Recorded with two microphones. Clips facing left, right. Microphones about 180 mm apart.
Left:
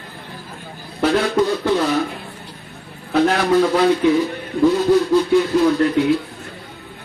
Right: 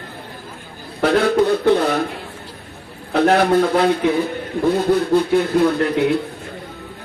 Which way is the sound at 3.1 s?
60° right (ahead or behind).